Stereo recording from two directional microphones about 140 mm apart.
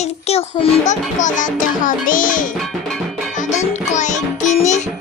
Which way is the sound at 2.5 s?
Centre (ahead or behind).